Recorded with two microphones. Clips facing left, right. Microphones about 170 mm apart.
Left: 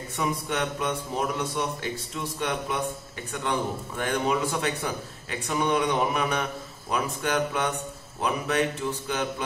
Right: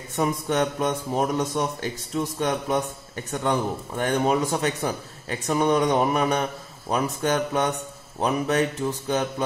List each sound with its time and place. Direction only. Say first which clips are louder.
0.1 s speech: right 5 dB; 40° right (ahead or behind)